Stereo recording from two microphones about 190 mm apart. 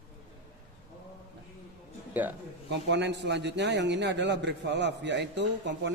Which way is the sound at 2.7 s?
65° right (ahead or behind).